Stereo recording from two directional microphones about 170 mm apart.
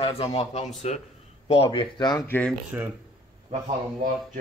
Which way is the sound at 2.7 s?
10° right (ahead or behind).